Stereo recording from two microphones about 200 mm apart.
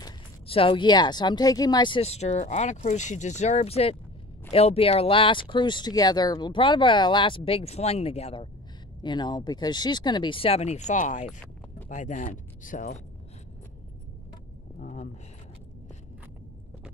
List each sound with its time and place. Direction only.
0.0 s speech: 25° left (ahead or behind)
14.8 s keys jangling: 40° left (ahead or behind)